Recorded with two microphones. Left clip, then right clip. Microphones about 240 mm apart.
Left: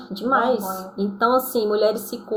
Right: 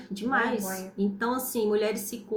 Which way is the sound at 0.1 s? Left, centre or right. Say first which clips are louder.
Left 7 dB; right.